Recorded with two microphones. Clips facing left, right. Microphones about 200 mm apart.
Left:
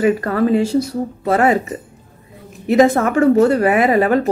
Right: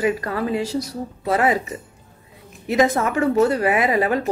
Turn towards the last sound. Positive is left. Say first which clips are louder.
# left 5 dB
turn(degrees=50)  # may be behind; listen again after turning